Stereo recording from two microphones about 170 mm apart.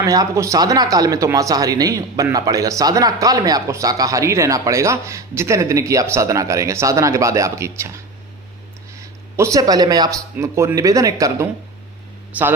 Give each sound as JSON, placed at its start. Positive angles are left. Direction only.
{"t": 0.0, "sound": "speech", "side_deg": -20}
{"t": 9.0, "sound": "speech", "side_deg": -15}
{"t": 12.3, "sound": "speech", "side_deg": -10}